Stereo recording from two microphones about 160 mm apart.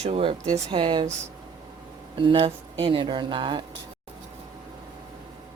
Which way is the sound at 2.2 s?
35° right (ahead or behind).